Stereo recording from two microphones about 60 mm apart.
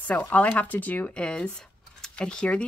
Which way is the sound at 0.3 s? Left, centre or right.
Left.